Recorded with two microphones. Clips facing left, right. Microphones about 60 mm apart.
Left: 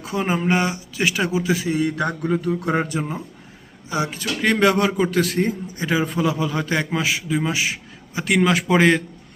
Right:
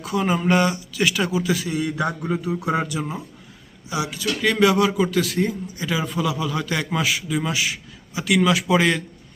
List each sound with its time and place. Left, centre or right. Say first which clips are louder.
0.0 s a man's voice: right 1 dB; left